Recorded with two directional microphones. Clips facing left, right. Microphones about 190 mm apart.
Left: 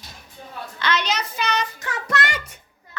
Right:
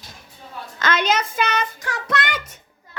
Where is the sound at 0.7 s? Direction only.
50° right (ahead or behind).